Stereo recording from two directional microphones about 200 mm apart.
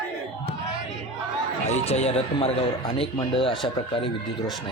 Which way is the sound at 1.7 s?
30° left (ahead or behind).